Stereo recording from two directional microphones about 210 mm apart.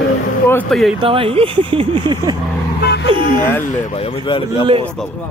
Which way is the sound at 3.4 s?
10° left (ahead or behind).